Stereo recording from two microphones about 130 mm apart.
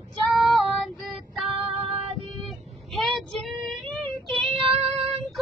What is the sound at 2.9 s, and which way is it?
Child singing, centre (ahead or behind).